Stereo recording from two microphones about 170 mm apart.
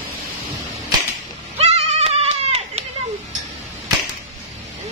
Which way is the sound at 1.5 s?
40° right (ahead or behind).